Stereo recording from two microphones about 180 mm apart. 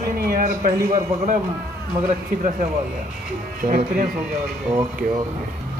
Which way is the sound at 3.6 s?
45° right (ahead or behind).